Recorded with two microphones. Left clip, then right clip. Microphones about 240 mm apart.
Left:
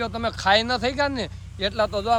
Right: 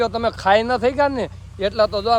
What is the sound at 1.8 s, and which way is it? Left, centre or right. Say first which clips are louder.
Speech: right 3 dB; right.